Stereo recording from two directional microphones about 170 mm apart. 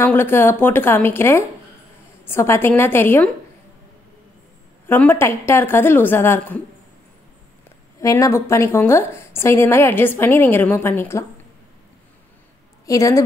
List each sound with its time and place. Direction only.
0.0 s a woman's voice: 10° left (ahead or behind)
4.8 s a woman's voice: 10° left (ahead or behind)
8.0 s a woman's voice: 20° left (ahead or behind)
12.8 s a woman's voice: 20° left (ahead or behind)